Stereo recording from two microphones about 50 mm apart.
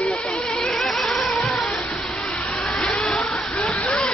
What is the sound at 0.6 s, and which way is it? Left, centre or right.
Vehicle, centre.